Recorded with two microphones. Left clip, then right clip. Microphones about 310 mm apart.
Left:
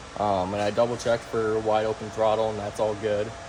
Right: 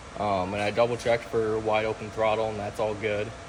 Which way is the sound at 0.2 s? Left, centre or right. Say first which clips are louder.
Left 2 dB; centre.